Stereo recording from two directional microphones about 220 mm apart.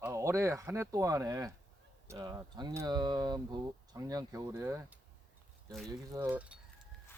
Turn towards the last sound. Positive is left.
turn(degrees=-10)  # may be behind; listen again after turning